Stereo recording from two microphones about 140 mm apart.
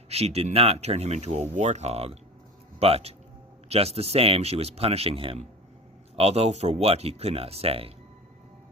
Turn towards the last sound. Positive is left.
turn(degrees=-45)  # may be behind; listen again after turning